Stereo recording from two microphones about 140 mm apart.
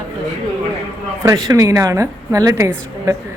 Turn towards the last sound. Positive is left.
turn(degrees=-25)  # may be behind; listen again after turning